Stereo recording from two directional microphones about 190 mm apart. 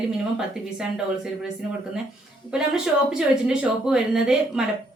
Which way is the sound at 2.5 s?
5° right (ahead or behind).